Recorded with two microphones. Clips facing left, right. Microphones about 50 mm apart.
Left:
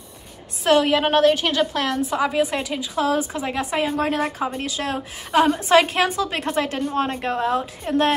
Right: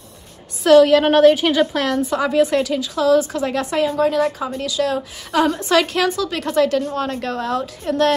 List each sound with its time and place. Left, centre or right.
0.7 s a woman's voice: centre
1.0 s a woman's voice: centre
3.8 s a woman's voice: left
5.4 s a woman's voice: centre